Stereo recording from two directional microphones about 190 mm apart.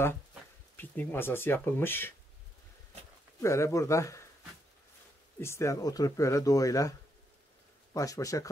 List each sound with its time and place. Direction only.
0.7 s speech: 10° left (ahead or behind)
3.3 s speech: 15° left (ahead or behind)
5.4 s speech: 15° left (ahead or behind)
7.9 s speech: 20° left (ahead or behind)